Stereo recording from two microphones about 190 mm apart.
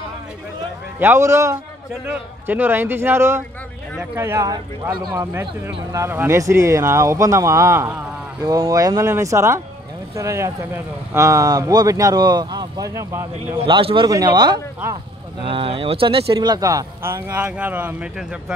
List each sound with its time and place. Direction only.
0.9 s speech: 10° right (ahead or behind)
13.7 s speech: 25° right (ahead or behind); by 18.4 s 10° right (ahead or behind)